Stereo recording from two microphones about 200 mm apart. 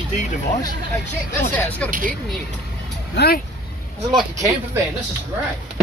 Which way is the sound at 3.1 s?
55° left (ahead or behind).